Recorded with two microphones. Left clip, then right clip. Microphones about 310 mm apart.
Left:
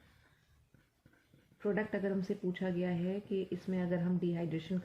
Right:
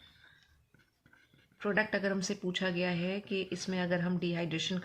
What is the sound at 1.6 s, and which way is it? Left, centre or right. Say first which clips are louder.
Speech: right 4 dB; right.